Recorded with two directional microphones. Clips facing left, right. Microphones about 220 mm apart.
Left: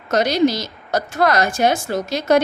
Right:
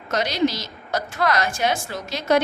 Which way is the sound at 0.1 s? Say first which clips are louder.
Left 5 dB; 45° left (ahead or behind).